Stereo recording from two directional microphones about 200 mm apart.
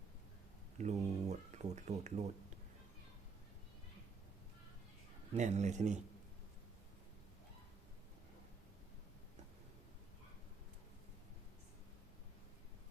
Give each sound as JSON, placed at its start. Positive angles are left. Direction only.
{"t": 0.8, "sound": "speech", "side_deg": -35}
{"t": 5.3, "sound": "speech", "side_deg": -35}